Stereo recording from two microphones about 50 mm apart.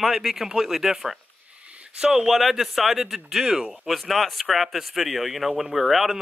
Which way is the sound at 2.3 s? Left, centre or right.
Centre.